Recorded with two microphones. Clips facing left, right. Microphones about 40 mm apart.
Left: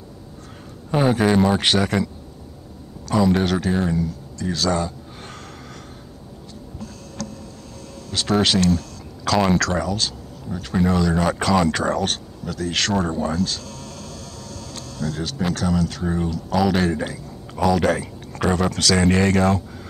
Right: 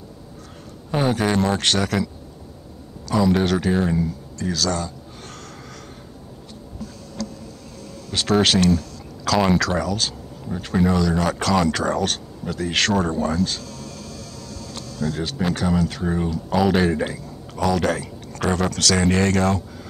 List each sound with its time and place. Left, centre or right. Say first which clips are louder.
0.9 s speech: left 3 dB; centre
3.1 s speech: even; centre
4.5 s speech: left 2 dB; centre
8.5 s speech: right 1 dB; centre
9.9 s a sound: even; centre
10.7 s speech: even; centre
12.4 s speech: right 2 dB; centre
12.9 s speech: right 1 dB; centre
15.0 s speech: right 1 dB; centre
17.6 s speech: left 2 dB; centre